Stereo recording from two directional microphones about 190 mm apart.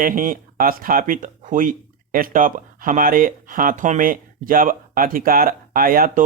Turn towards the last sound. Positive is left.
turn(degrees=-50)  # may be behind; listen again after turning